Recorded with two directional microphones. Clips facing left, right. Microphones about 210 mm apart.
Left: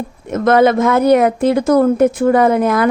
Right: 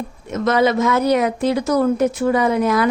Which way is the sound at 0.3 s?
55° left (ahead or behind).